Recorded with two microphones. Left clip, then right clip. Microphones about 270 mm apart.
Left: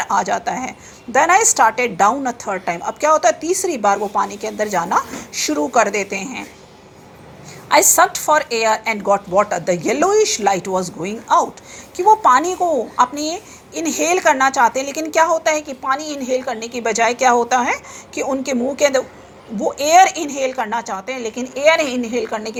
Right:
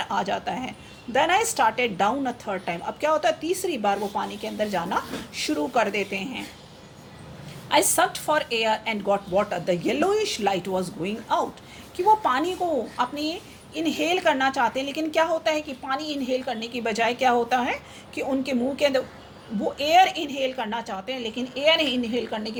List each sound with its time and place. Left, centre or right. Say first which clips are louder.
0.0 s a woman's voice: left 8 dB; centre
7.7 s a woman's voice: left 8 dB; centre